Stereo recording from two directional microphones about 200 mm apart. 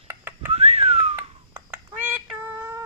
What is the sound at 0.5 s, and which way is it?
Whistling, 30° right (ahead or behind).